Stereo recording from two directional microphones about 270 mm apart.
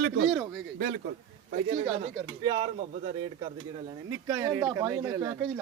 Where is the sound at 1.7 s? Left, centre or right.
Right.